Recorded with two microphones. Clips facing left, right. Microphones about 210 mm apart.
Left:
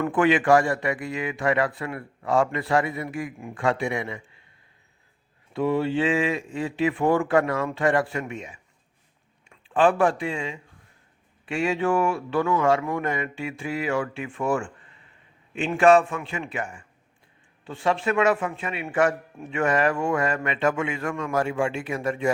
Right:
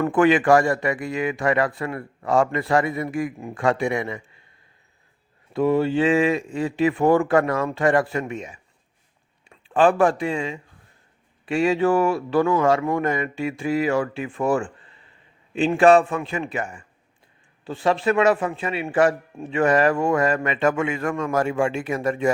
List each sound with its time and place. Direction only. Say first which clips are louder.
0.0 s a man's voice: right 3 dB; 45° right (ahead or behind)
5.5 s a man's voice: right 4 dB; 40° right (ahead or behind)
17.7 s a man's voice: right 4 dB; 35° right (ahead or behind)